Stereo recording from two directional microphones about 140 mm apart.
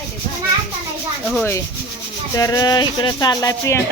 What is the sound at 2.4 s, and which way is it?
Speech, 25° left (ahead or behind).